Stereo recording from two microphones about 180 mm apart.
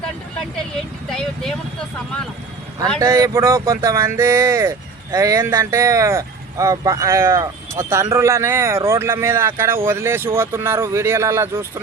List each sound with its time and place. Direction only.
1.1 s speech: 5° left (ahead or behind)
3.0 s speech: 15° right (ahead or behind)